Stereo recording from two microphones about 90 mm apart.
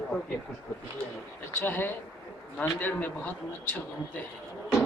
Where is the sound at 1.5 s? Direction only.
25° left (ahead or behind).